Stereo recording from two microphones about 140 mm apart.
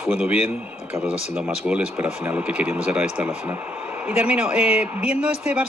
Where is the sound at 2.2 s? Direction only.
10° right (ahead or behind).